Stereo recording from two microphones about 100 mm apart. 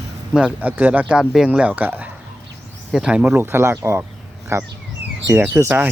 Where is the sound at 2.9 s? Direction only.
5° right (ahead or behind).